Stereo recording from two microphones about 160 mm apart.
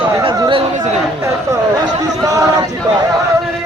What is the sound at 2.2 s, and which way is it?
Speech, 20° right (ahead or behind).